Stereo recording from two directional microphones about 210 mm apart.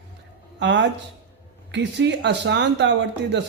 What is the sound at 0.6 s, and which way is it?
Speech, 60° right (ahead or behind).